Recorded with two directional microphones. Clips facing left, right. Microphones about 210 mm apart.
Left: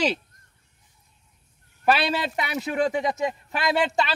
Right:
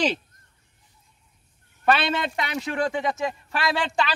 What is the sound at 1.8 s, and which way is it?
Speech, 5° left (ahead or behind).